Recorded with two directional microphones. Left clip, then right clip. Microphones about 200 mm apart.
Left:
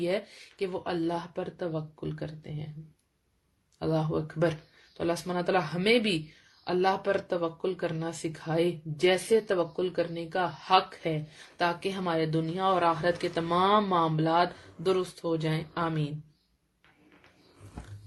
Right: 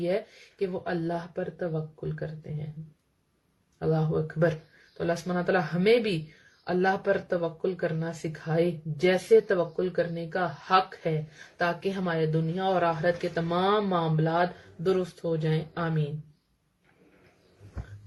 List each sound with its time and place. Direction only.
0.0 s speech: 30° left (ahead or behind)
3.8 s speech: 30° left (ahead or behind)